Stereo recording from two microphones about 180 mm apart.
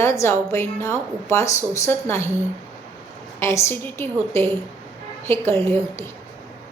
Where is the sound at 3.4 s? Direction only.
15° left (ahead or behind).